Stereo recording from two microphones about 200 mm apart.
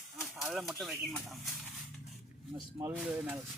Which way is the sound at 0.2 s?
Centre (ahead or behind).